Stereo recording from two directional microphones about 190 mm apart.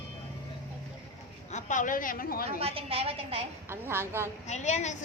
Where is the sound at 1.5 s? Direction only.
40° left (ahead or behind).